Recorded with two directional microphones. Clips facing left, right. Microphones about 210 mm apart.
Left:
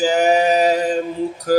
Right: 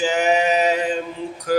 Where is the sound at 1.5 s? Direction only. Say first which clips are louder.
Left 4 dB; 35° left (ahead or behind).